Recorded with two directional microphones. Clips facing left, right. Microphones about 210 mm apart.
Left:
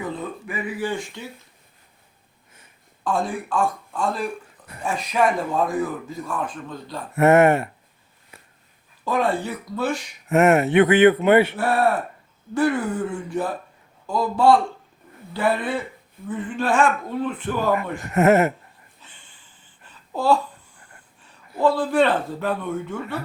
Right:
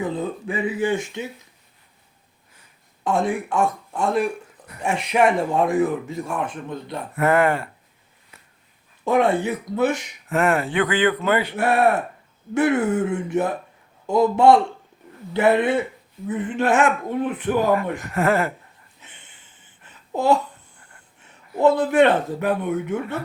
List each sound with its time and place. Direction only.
0.0 s speech: 25° right (ahead or behind)
3.0 s speech: 20° right (ahead or behind)
7.2 s speech: 25° left (ahead or behind)
9.0 s speech: 20° right (ahead or behind)
10.2 s speech: 20° left (ahead or behind)
11.5 s speech: 20° right (ahead or behind)
18.0 s speech: 20° left (ahead or behind)
19.0 s a sound: 20° right (ahead or behind)
21.2 s a man's voice: 25° right (ahead or behind)